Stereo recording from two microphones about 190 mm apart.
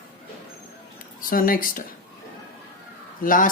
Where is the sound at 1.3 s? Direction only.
50° left (ahead or behind).